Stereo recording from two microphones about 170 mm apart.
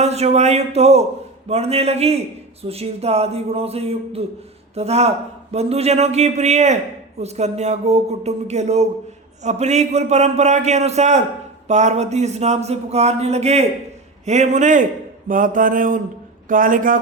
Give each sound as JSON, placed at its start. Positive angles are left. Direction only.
{"t": 0.0, "sound": "a man's voice", "side_deg": -40}
{"t": 14.3, "sound": "mantra", "side_deg": -40}